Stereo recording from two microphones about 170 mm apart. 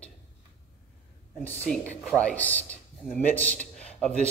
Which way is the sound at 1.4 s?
10° left (ahead or behind).